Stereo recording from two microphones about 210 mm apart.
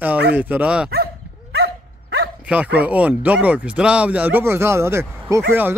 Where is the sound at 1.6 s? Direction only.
50° right (ahead or behind).